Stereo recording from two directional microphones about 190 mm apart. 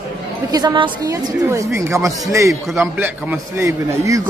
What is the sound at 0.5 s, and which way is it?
A woman's voice, 20° right (ahead or behind).